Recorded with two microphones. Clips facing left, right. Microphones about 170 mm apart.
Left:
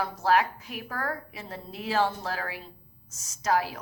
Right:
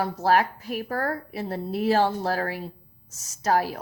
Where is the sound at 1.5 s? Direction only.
55° right (ahead or behind).